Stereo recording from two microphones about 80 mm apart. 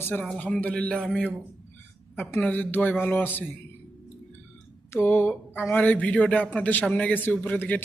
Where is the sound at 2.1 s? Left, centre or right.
Left.